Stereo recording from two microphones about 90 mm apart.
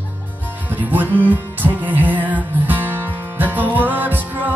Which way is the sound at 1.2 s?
20° right (ahead or behind).